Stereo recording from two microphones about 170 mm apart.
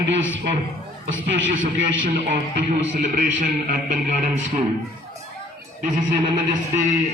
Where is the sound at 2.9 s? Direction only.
55° right (ahead or behind).